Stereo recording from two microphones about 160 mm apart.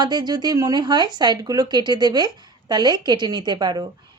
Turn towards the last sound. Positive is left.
turn(degrees=-25)  # may be behind; listen again after turning